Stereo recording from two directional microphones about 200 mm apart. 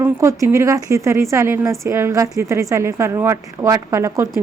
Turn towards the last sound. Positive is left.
turn(degrees=-15)  # may be behind; listen again after turning